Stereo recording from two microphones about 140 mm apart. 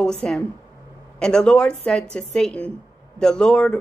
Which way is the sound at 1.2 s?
5° left (ahead or behind).